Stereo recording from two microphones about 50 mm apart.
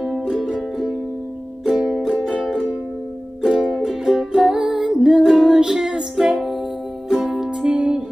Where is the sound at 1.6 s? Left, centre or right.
Centre.